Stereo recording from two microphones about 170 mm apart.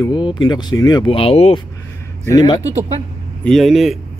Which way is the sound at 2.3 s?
25° left (ahead or behind).